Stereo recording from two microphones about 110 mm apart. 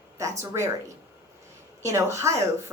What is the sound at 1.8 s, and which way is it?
Speech, 25° right (ahead or behind).